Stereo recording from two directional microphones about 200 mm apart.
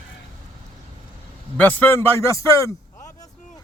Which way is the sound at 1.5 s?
5° left (ahead or behind).